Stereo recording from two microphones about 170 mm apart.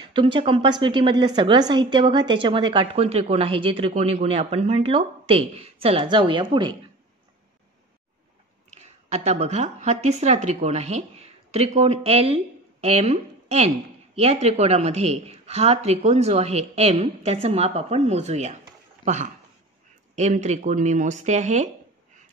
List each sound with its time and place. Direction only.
0.1 s a woman's voice: 30° right (ahead or behind)
9.1 s a woman's voice: 40° right (ahead or behind)
20.2 s speech: 40° right (ahead or behind)